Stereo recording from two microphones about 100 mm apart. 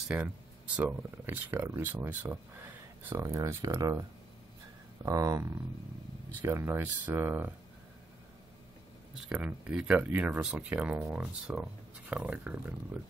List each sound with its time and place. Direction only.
0.1 s speech: 15° right (ahead or behind)
3.2 s speech: 35° right (ahead or behind)
5.0 s speech: 35° right (ahead or behind)
9.3 s speech: 10° right (ahead or behind)